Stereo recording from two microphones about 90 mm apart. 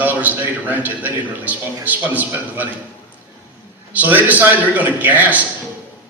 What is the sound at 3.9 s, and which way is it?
A man's voice, 20° right (ahead or behind).